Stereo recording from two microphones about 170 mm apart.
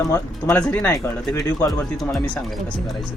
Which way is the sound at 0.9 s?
20° left (ahead or behind).